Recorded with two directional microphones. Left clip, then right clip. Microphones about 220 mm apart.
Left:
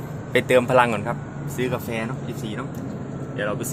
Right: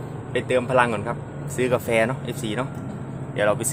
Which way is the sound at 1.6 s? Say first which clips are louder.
Right 6 dB; 15° right (ahead or behind).